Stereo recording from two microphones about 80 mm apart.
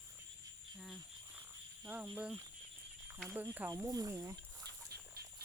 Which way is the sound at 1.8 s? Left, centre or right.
Centre.